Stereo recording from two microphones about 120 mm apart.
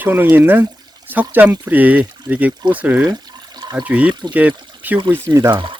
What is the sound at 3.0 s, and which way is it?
Water, 30° right (ahead or behind).